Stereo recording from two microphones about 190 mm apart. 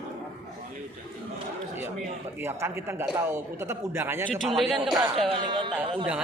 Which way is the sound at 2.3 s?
15° right (ahead or behind).